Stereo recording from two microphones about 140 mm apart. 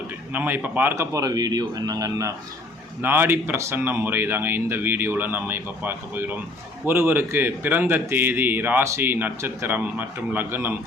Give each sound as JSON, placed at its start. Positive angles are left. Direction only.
{"t": 0.3, "sound": "a man's voice", "side_deg": -15}